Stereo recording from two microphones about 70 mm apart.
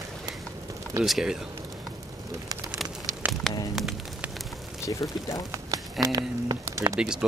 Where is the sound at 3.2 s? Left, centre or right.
Right.